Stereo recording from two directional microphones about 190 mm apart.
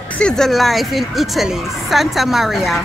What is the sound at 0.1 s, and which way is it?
A woman's voice, 5° left (ahead or behind).